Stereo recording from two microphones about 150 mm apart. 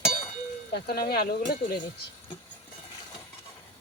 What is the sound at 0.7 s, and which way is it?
Speech, 90° left.